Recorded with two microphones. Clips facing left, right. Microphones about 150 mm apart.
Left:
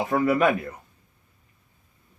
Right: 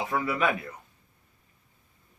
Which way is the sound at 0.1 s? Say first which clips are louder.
Left 10 dB; 45° left (ahead or behind).